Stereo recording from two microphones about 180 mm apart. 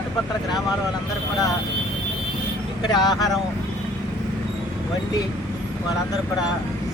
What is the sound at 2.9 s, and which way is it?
Speech, 20° left (ahead or behind).